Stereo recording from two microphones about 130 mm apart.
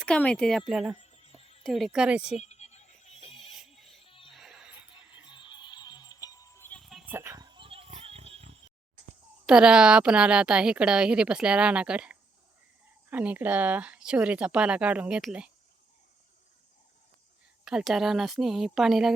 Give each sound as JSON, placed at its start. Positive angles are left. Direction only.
{"t": 0.0, "sound": "speech", "side_deg": 10}
{"t": 0.7, "sound": "speech", "side_deg": -5}
{"t": 0.9, "sound": "a sound", "side_deg": 55}
{"t": 1.6, "sound": "speech", "side_deg": 0}
{"t": 2.4, "sound": "a sound", "side_deg": 60}
{"t": 3.4, "sound": "music", "side_deg": 0}
{"t": 4.0, "sound": "music", "side_deg": 45}
{"t": 4.3, "sound": "music", "side_deg": -5}
{"t": 5.2, "sound": "music", "side_deg": 35}
{"t": 6.7, "sound": "a sound", "side_deg": 5}
{"t": 7.0, "sound": "a sound", "side_deg": -15}
{"t": 7.3, "sound": "wild animals", "side_deg": -35}
{"t": 9.5, "sound": "a woman's voice", "side_deg": -5}
{"t": 17.7, "sound": "speech", "side_deg": -5}